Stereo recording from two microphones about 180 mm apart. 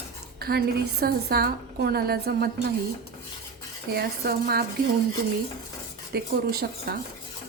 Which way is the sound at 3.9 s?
60° right (ahead or behind).